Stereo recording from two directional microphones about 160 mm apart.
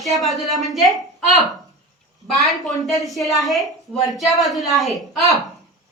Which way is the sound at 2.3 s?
Centre (ahead or behind).